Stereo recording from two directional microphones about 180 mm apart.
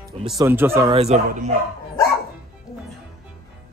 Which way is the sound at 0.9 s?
35° right (ahead or behind).